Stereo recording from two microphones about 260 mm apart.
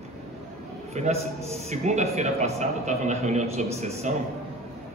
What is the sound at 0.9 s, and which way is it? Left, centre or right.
A man's voice, right.